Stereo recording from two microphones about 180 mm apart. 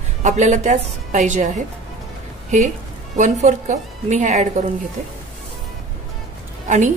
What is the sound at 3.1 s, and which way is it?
Speech, 40° right (ahead or behind).